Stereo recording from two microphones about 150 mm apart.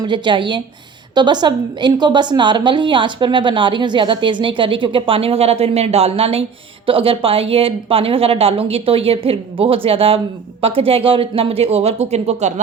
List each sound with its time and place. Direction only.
0.0 s a woman's voice: 30° right (ahead or behind); by 12.5 s 50° right (ahead or behind)